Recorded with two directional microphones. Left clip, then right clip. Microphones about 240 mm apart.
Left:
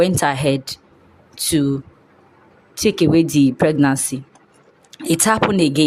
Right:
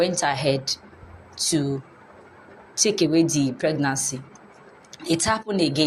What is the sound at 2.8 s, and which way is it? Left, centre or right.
Speech, left.